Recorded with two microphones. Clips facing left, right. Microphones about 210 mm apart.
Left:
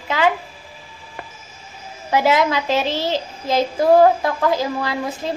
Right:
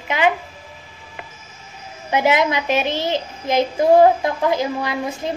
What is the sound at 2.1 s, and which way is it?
A woman's voice, 20° right (ahead or behind).